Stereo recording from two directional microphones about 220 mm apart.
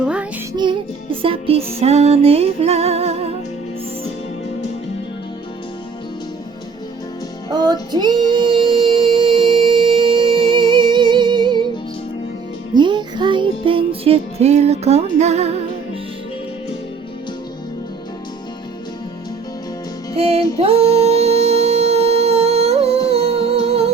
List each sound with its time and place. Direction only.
0.5 s music: 20° right (ahead or behind)
7.5 s female singing: 20° right (ahead or behind)
12.7 s music: 20° right (ahead or behind)
20.1 s music: 30° right (ahead or behind)